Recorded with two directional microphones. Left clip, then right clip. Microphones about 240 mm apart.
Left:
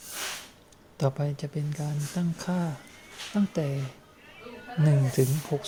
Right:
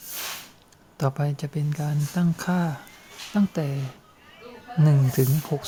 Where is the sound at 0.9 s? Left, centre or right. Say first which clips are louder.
Right 2 dB; centre.